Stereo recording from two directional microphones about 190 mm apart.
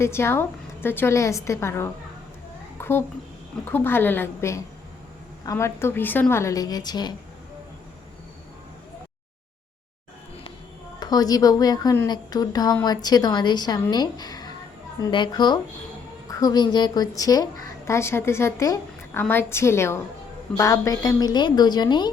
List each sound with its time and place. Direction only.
0.0 s a woman's voice: 15° left (ahead or behind)
2.8 s a sound: 10° left (ahead or behind)
3.7 s a woman's voice: 10° left (ahead or behind)
11.0 s a woman's voice: 20° left (ahead or behind)